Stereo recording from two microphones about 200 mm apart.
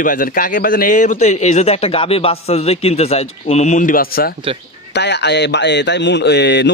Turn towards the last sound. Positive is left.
turn(degrees=60)  # may be behind; listen again after turning